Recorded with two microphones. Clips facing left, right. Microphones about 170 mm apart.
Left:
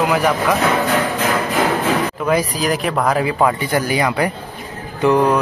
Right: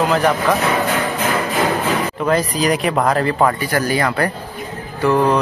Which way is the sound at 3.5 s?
20° left (ahead or behind).